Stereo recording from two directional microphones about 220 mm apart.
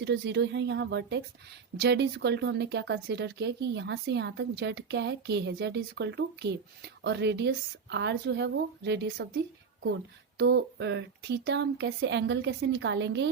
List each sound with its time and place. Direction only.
0.0 s speech: 50° right (ahead or behind)